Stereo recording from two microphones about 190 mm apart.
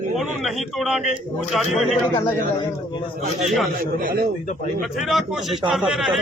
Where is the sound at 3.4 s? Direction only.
Centre (ahead or behind).